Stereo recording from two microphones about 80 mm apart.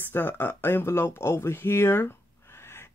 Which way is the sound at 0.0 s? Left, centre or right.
Left.